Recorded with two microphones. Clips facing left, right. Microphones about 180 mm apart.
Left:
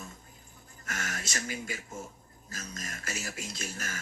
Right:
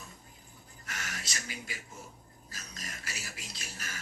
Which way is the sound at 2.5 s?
45° left (ahead or behind).